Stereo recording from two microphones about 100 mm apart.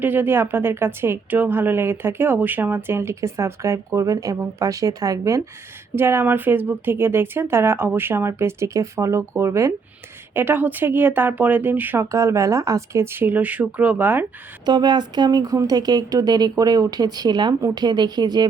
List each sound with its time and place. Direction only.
0.0 s a woman's voice: 20° right (ahead or behind); by 5.4 s 35° right (ahead or behind)
5.9 s a woman's voice: 25° right (ahead or behind)
12.1 s a woman's voice: 30° right (ahead or behind)
14.6 s speech: 45° right (ahead or behind)